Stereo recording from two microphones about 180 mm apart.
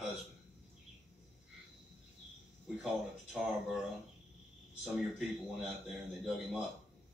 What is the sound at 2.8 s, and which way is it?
A man's voice, centre (ahead or behind).